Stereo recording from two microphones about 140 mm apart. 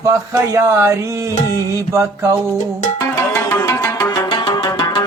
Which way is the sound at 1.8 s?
20° right (ahead or behind).